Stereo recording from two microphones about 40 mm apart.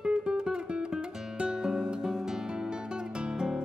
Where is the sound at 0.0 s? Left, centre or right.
Right.